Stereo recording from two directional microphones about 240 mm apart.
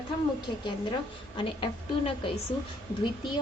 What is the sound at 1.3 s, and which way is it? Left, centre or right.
A woman's voice, left.